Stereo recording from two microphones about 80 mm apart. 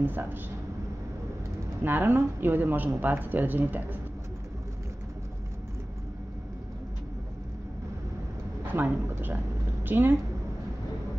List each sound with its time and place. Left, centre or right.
0.0 s speech: right
1.8 s speech: right
8.7 s a woman's voice: right